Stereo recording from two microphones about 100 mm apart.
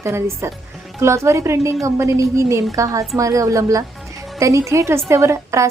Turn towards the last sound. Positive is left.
turn(degrees=-30)  # may be behind; listen again after turning